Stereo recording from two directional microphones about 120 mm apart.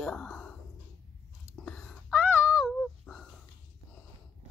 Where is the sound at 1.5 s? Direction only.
5° left (ahead or behind).